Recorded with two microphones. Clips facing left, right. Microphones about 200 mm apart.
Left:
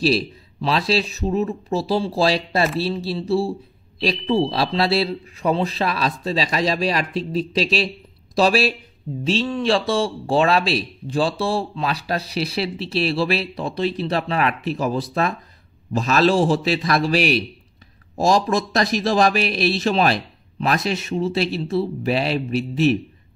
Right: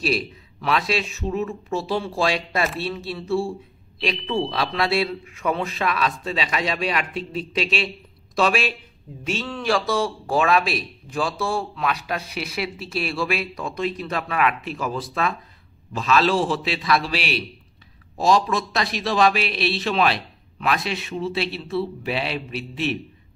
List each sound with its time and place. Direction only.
0.0 s a man's voice: 30° left (ahead or behind)